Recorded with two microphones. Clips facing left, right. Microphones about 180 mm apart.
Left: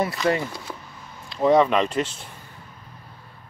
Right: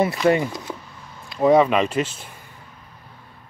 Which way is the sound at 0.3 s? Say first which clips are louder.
Right 4 dB; 20° right (ahead or behind).